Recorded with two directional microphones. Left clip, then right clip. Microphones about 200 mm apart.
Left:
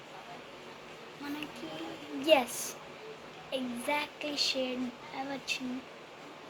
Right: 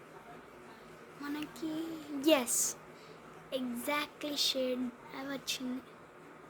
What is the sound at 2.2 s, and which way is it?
A woman's voice, 55° right (ahead or behind).